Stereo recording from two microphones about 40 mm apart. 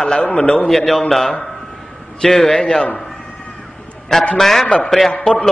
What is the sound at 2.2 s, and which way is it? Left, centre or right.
Speech, centre.